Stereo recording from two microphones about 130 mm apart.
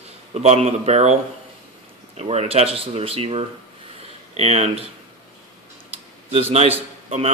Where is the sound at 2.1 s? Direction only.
50° right (ahead or behind).